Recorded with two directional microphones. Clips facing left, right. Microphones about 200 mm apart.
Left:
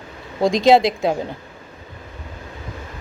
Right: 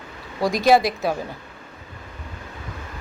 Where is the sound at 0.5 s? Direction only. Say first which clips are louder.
Left 3 dB; 20° left (ahead or behind).